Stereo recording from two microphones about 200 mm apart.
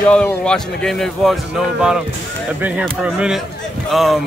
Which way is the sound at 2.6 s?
5° right (ahead or behind).